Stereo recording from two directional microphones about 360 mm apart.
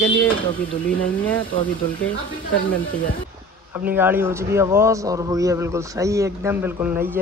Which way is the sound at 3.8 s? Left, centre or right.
Centre.